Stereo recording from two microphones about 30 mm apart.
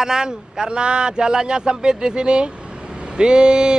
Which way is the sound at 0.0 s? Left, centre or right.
Right.